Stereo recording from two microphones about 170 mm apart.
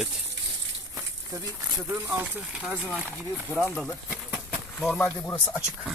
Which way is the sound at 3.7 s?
Centre (ahead or behind).